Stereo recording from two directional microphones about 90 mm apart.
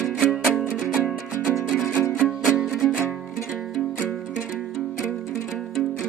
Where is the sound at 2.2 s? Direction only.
5° right (ahead or behind).